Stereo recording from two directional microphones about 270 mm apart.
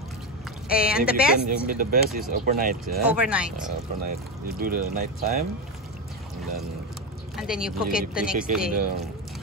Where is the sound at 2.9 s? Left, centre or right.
Centre.